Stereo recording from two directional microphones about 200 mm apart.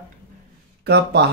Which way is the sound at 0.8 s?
55° right (ahead or behind).